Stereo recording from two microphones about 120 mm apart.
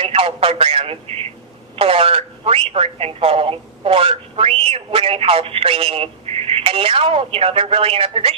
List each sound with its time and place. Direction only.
0.0 s speech: 55° right (ahead or behind)